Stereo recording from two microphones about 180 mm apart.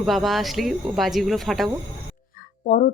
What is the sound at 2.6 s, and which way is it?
Speech, 45° left (ahead or behind).